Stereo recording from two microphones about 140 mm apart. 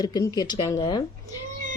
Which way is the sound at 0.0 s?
25° left (ahead or behind).